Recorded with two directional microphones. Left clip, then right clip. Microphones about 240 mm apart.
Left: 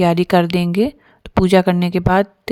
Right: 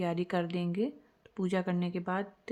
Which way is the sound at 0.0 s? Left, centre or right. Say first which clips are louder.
Left 18 dB; left.